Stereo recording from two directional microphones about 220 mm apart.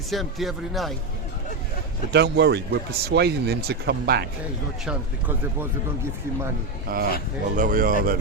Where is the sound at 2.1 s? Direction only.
50° right (ahead or behind).